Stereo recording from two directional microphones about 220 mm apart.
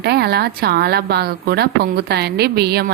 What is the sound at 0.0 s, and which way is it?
A woman's voice, 50° right (ahead or behind).